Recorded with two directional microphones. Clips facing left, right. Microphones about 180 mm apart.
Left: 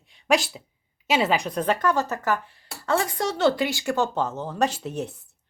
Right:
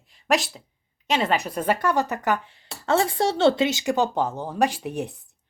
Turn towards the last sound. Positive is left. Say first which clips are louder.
# right 1 dB
turn(degrees=-15)  # may be behind; listen again after turning